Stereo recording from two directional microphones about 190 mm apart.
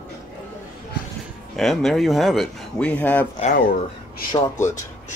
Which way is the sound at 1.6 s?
Centre (ahead or behind).